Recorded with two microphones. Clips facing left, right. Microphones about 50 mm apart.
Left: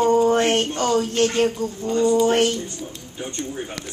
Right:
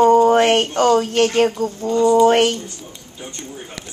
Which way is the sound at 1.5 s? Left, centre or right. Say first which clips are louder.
Right 4 dB; right.